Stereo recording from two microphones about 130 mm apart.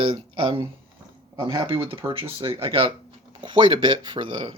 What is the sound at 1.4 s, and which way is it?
Speech, 40° right (ahead or behind).